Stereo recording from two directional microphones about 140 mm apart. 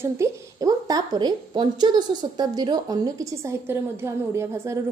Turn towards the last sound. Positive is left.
turn(degrees=-20)  # may be behind; listen again after turning